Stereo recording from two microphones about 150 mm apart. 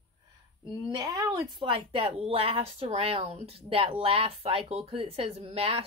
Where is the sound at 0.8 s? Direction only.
30° right (ahead or behind).